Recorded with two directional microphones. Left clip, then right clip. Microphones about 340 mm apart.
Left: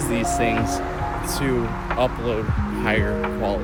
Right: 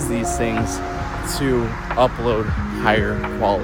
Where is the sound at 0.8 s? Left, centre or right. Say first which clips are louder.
Even; left.